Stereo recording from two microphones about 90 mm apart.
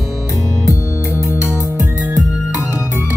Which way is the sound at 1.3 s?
35° left (ahead or behind).